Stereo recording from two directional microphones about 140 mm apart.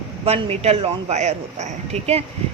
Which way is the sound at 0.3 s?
45° right (ahead or behind).